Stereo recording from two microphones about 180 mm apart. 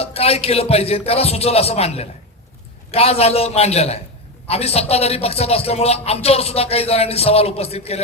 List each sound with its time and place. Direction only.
0.0 s speech: 35° left (ahead or behind)